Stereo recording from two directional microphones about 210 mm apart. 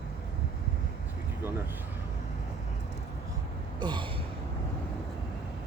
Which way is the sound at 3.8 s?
20° right (ahead or behind).